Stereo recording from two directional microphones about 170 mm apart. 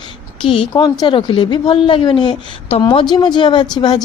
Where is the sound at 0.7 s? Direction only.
25° left (ahead or behind).